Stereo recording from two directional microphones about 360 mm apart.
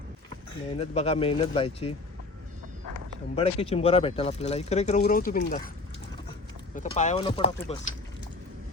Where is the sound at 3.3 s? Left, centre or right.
Centre.